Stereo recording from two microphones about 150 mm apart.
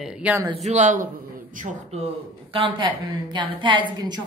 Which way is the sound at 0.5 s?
50° right (ahead or behind).